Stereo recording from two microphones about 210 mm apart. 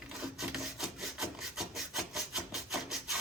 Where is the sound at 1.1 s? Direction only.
Centre (ahead or behind).